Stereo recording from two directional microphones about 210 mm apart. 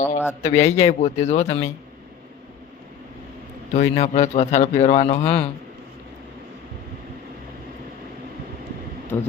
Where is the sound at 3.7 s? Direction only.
35° left (ahead or behind).